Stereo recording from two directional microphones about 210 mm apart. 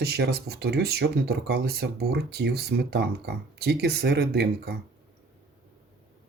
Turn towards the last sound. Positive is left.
turn(degrees=-50)  # may be behind; listen again after turning